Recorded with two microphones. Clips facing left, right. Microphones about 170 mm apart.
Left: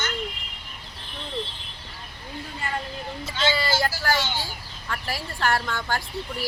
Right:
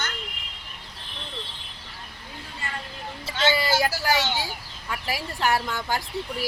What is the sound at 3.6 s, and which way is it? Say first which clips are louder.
A woman's voice: right 1 dB; 15° right (ahead or behind).